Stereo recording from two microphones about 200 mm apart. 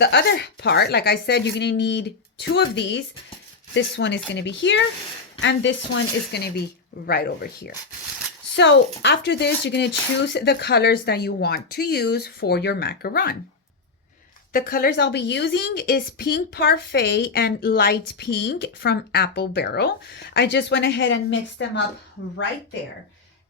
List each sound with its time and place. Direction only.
0.0 s a woman's voice: 55° left (ahead or behind)
8.5 s speech: 65° left (ahead or behind)
14.5 s a woman's voice: 50° left (ahead or behind); by 21.7 s 65° left (ahead or behind)